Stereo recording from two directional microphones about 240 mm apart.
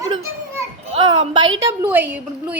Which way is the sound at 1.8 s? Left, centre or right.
Centre.